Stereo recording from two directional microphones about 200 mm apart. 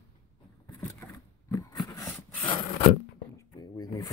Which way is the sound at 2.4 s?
25° left (ahead or behind).